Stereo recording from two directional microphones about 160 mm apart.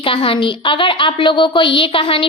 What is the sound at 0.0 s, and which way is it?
A woman's voice, 35° left (ahead or behind).